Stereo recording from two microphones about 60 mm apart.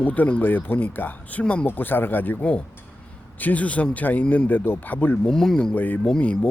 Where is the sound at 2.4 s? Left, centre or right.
Left.